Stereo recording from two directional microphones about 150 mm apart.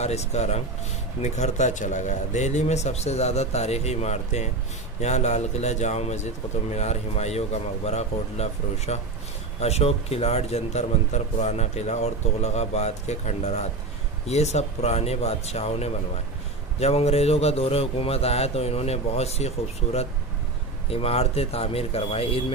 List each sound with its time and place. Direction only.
0.0 s speech: 45° left (ahead or behind)